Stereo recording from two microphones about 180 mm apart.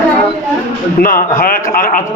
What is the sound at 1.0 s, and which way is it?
A man's voice, 50° left (ahead or behind).